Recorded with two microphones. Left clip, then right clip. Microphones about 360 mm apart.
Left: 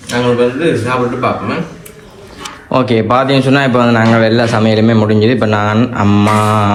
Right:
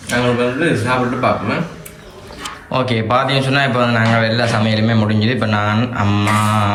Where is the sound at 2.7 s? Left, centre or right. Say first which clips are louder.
Left 5 dB; centre.